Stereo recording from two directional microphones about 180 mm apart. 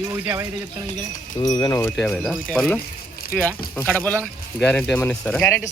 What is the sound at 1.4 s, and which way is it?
Speech, 20° left (ahead or behind).